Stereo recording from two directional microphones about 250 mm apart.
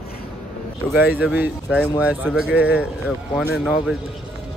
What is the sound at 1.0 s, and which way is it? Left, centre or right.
Speech, centre.